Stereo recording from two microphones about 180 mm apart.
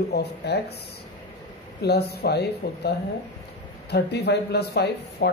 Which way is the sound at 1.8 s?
65° left (ahead or behind).